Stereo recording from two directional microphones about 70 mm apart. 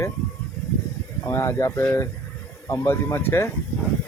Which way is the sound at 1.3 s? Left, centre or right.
Left.